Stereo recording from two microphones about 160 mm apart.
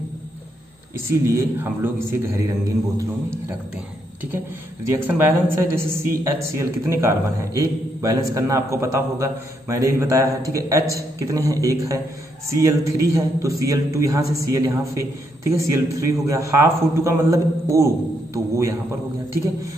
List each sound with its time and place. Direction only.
0.9 s speech: 15° right (ahead or behind)
4.8 s a man's voice: 15° right (ahead or behind)